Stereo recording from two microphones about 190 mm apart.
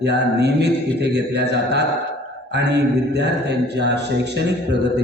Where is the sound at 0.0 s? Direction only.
60° right (ahead or behind).